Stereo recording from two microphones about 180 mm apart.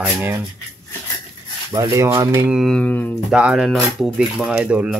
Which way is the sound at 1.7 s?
20° right (ahead or behind).